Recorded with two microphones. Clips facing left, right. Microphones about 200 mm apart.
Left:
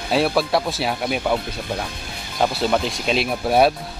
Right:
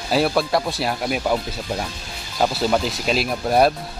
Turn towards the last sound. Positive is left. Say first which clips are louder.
# even
turn(degrees=0)  # may be behind; listen again after turning